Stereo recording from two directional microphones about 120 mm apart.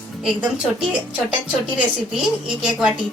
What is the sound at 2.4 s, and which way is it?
Speech, 5° right (ahead or behind).